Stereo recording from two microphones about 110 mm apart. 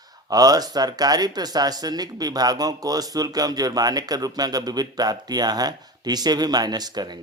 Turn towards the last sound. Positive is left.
turn(degrees=-40)  # may be behind; listen again after turning